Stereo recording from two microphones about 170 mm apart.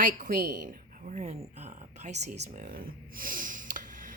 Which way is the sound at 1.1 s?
40° right (ahead or behind).